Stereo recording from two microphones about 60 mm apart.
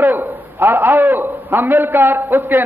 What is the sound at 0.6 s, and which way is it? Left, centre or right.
A man's voice, right.